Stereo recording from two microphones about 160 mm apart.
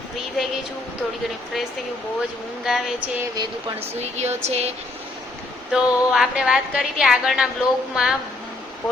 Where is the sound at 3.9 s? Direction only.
45° right (ahead or behind).